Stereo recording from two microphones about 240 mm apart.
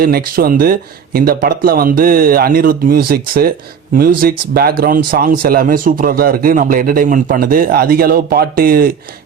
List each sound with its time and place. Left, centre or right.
0.0 s a man's voice: right